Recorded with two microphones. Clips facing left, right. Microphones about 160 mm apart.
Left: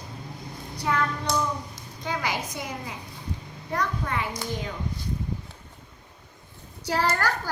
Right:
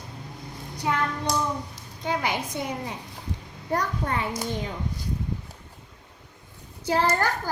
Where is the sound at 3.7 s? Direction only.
35° right (ahead or behind).